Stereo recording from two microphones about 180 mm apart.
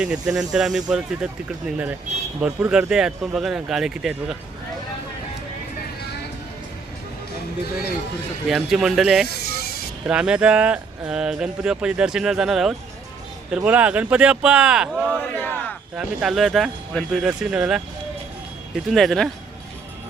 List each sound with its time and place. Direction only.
0.0 s speech: 5° right (ahead or behind)
8.4 s speech: centre (ahead or behind)
9.3 s a sound: 60° left (ahead or behind)
10.1 s speech: 5° right (ahead or behind)
15.4 s speech: 10° left (ahead or behind)
16.0 s speech: centre (ahead or behind)
18.9 s speech: centre (ahead or behind)